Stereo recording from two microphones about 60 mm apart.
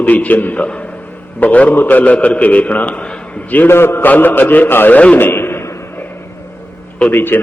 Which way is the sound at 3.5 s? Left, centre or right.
Left.